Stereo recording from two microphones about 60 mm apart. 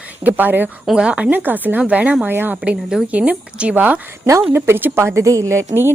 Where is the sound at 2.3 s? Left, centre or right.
Right.